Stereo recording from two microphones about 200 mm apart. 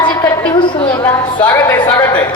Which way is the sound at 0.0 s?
25° left (ahead or behind).